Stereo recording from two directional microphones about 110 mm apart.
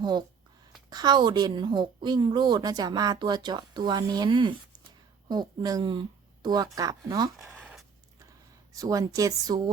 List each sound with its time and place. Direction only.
0.0 s a woman's voice: 40° right (ahead or behind)
7.4 s zipper: 5° right (ahead or behind)
8.7 s a woman's voice: 30° right (ahead or behind)